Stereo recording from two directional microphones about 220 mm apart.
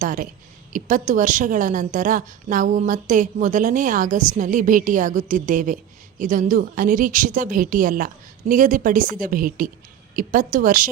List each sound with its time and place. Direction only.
0.0 s a woman's voice: 35° right (ahead or behind)